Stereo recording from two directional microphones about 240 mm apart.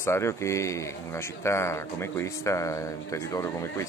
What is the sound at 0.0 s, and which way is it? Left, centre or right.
Speech, centre.